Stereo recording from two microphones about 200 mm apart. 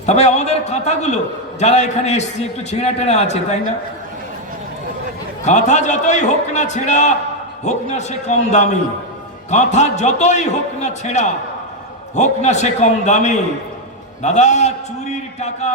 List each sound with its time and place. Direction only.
0.0 s a man's voice: 35° left (ahead or behind)
5.5 s a man's voice: 35° left (ahead or behind)